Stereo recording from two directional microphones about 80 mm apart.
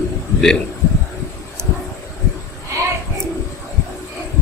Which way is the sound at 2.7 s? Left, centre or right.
Right.